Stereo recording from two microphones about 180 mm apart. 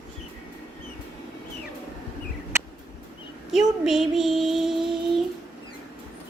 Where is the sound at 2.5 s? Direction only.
15° right (ahead or behind).